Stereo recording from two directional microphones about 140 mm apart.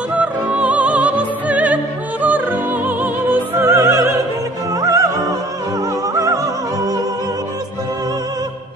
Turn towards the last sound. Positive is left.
turn(degrees=-25)  # may be behind; listen again after turning